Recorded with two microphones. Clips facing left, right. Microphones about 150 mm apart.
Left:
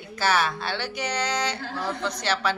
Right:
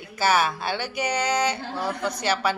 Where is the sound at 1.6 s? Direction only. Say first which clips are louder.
Right 1 dB; 20° right (ahead or behind).